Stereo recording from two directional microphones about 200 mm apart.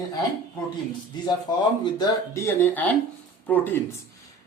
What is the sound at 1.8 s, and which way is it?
Speech, 20° left (ahead or behind).